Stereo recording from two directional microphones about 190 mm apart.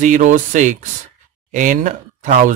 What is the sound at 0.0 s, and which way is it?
Speech, 40° right (ahead or behind).